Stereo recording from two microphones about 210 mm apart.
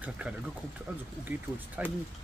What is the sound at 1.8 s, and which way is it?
Speech, 5° right (ahead or behind).